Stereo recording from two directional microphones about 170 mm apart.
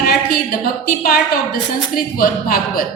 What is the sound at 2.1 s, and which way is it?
Speech, 60° left (ahead or behind).